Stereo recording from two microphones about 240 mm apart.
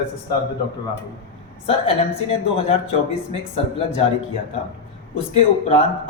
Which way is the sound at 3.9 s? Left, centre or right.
Left.